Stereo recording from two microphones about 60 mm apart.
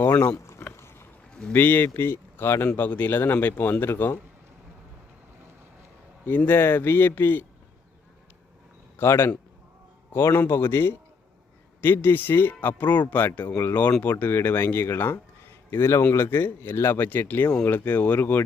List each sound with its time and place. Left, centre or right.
0.0 s a sound: left
0.3 s a sound: left
0.8 s boat: left
1.5 s speech: left
2.7 s speech: left
6.2 s speech: left
9.0 s a man's voice: left
15.7 s a man's voice: left
16.1 s speech: left